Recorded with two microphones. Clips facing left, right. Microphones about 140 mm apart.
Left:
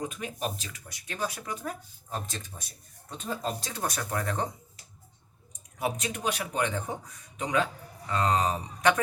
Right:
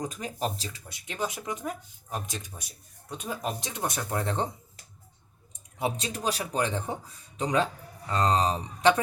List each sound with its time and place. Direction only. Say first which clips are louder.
0.0 s speech: right 2 dB; 40° right (ahead or behind)
5.5 s speech: right 1 dB; 25° right (ahead or behind)